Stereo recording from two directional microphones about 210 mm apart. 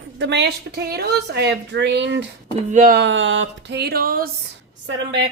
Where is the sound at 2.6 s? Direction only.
40° right (ahead or behind).